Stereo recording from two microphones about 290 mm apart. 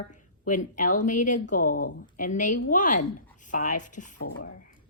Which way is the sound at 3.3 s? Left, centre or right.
Left.